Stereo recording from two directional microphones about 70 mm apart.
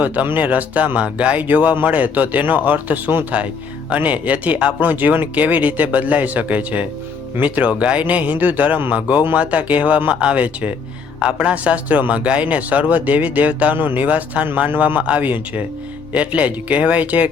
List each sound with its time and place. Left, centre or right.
0.0 s speech: right